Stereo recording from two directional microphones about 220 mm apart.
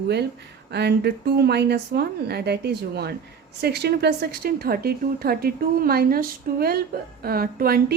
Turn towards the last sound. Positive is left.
turn(degrees=-45)  # may be behind; listen again after turning